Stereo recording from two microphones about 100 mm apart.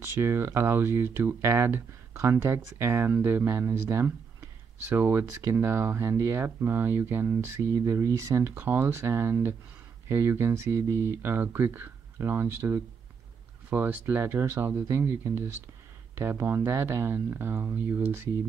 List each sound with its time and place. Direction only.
0.0 s speech: 25° right (ahead or behind)